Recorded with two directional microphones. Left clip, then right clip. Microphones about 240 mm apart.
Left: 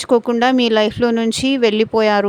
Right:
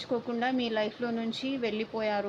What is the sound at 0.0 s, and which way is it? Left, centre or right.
Speech, left.